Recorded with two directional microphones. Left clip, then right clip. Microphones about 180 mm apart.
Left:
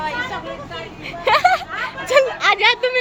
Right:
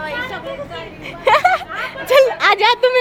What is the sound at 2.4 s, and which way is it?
Speech, 35° right (ahead or behind).